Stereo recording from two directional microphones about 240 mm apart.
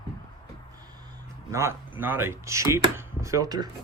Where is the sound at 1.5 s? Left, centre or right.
Centre.